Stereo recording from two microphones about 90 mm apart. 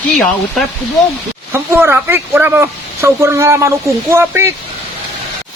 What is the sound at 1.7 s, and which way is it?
Speech, 25° right (ahead or behind).